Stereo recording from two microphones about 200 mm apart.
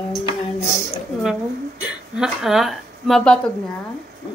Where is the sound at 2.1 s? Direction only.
Centre (ahead or behind).